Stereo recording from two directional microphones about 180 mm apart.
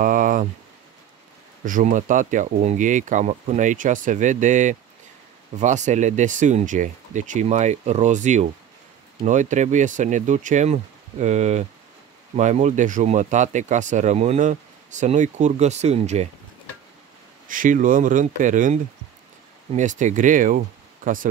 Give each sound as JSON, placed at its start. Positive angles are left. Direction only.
{"t": 0.0, "sound": "a sound", "side_deg": -45}
{"t": 1.6, "sound": "speech", "side_deg": -45}
{"t": 17.5, "sound": "speech", "side_deg": -50}